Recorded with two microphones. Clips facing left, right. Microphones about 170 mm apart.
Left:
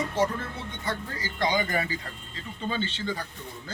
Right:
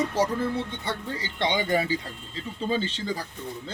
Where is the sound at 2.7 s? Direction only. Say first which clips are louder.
Right 3 dB; 35° right (ahead or behind).